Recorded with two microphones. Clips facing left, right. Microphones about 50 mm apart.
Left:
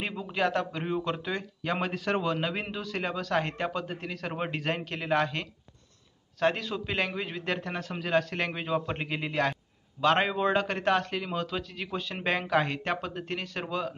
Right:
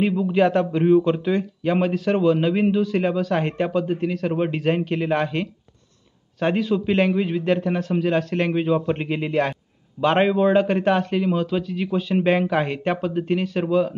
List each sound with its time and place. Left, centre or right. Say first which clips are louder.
0.0 s a man's voice: right 14 dB; centre
0.3 s a man's voice: right 7 dB; centre